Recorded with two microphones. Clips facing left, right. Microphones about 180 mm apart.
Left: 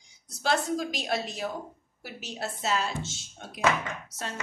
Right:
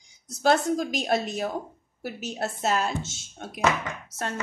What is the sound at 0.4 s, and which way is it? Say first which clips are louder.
Speech: right 5 dB; 50° right (ahead or behind).